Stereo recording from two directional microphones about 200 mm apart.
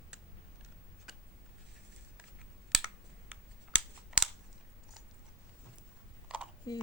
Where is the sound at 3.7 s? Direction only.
5° right (ahead or behind).